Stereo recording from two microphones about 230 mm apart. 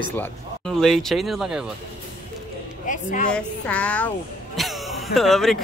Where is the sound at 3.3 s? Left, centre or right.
Centre.